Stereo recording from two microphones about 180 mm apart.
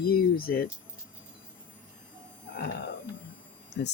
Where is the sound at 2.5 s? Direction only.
60° left (ahead or behind).